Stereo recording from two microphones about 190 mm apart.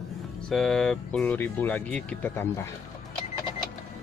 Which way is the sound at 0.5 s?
Centre (ahead or behind).